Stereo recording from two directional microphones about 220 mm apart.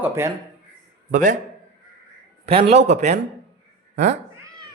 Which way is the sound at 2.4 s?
25° right (ahead or behind).